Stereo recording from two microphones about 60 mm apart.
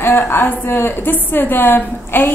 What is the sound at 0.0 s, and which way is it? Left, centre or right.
A woman's voice, left.